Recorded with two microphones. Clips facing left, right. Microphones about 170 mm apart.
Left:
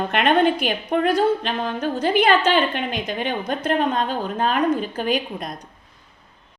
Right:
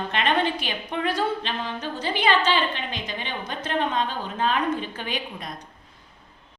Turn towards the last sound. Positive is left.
turn(degrees=45)  # may be behind; listen again after turning